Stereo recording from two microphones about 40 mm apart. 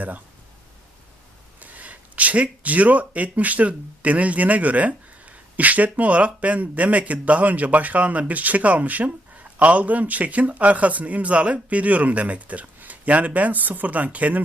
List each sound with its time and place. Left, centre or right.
1.6 s speech: right